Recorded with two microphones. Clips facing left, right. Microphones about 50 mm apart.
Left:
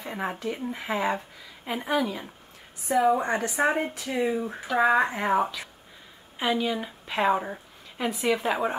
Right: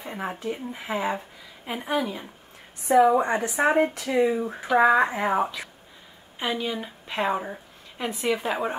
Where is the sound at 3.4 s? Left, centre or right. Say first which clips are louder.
Right 4 dB; right.